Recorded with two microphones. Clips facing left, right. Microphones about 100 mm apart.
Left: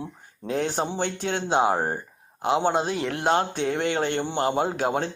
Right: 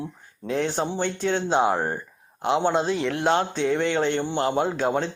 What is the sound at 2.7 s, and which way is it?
Speech, 50° left (ahead or behind).